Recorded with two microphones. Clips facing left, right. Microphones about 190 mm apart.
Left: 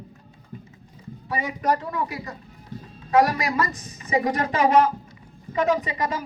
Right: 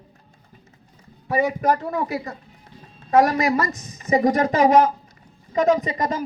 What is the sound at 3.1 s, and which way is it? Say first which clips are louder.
A man's voice: right 3 dB; 50° right (ahead or behind).